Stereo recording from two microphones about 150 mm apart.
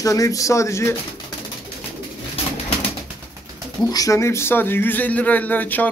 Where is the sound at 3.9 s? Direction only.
20° left (ahead or behind).